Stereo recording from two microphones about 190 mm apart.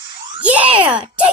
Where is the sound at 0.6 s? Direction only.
30° right (ahead or behind).